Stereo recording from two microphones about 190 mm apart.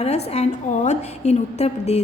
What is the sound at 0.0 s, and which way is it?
A woman's voice, 35° left (ahead or behind).